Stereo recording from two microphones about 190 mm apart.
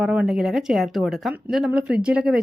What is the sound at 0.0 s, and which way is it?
Speech, 5° right (ahead or behind).